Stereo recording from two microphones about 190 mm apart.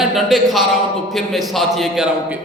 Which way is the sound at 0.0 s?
Centre (ahead or behind).